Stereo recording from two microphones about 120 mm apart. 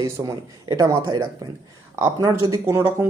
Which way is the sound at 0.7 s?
30° right (ahead or behind).